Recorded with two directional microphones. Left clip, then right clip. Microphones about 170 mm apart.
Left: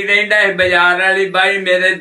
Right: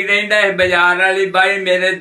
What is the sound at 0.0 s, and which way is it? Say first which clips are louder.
A man's voice: left 1 dB; 15° right (ahead or behind).